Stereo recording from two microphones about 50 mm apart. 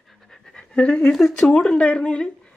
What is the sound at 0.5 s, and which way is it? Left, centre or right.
Speech, left.